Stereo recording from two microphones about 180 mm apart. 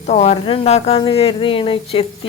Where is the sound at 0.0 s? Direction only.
35° left (ahead or behind).